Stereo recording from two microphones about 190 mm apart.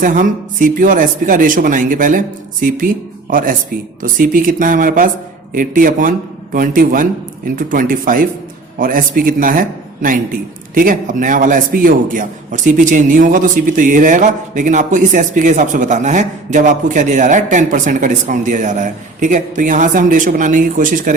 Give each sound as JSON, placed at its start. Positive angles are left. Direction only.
{"t": 0.0, "sound": "a man's voice", "side_deg": -45}